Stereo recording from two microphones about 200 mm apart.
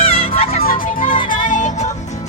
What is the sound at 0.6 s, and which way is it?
Music, 45° left (ahead or behind).